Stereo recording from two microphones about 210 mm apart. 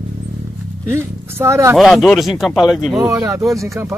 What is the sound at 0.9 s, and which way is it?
Speech, 10° right (ahead or behind).